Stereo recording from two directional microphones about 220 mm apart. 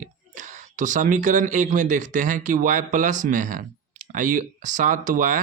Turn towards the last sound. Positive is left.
turn(degrees=-35)  # may be behind; listen again after turning